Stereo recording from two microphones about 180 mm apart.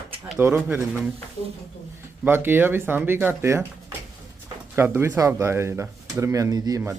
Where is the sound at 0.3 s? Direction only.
10° right (ahead or behind).